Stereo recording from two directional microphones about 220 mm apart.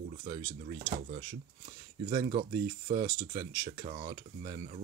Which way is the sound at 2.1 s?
25° right (ahead or behind).